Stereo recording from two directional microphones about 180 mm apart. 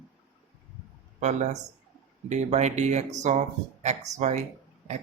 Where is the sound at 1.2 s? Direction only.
40° right (ahead or behind).